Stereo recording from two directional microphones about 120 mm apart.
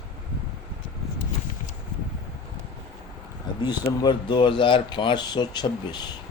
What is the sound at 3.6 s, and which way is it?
Speech, 35° left (ahead or behind).